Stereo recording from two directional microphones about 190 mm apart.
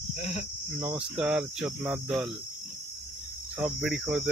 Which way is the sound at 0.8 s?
5° right (ahead or behind).